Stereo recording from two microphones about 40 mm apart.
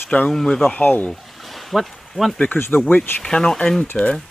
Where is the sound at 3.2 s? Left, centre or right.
Centre.